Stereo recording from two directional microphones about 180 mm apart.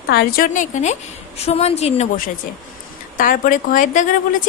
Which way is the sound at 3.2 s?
50° left (ahead or behind).